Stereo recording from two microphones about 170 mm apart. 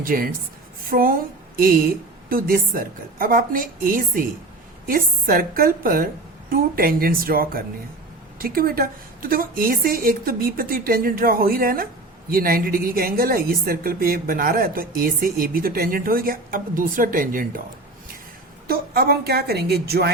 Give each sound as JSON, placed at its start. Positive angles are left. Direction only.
{"t": 0.0, "sound": "a woman's voice", "side_deg": -55}
{"t": 18.7, "sound": "a woman's voice", "side_deg": -65}